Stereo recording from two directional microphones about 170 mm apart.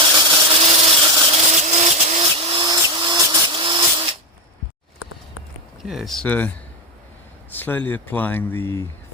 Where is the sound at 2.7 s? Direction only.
25° right (ahead or behind).